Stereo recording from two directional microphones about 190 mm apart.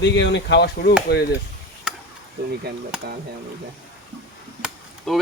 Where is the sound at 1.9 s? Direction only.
5° right (ahead or behind).